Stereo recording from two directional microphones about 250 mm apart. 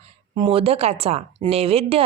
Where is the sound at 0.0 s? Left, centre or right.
Right.